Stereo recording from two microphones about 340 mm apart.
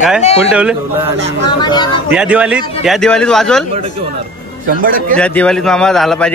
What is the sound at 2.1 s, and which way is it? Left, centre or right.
A man's voice, centre.